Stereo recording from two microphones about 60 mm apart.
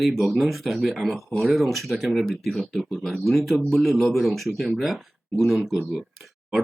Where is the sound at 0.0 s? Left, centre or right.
Centre.